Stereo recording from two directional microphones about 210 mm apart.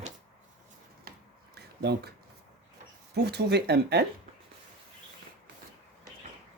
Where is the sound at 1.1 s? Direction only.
45° right (ahead or behind).